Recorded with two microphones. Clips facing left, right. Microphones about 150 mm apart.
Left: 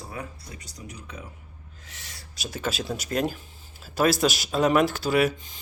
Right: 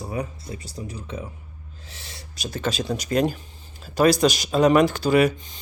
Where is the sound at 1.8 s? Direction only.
30° right (ahead or behind).